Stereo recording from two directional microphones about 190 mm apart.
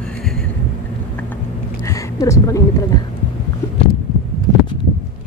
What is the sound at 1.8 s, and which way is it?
Speech, 15° left (ahead or behind).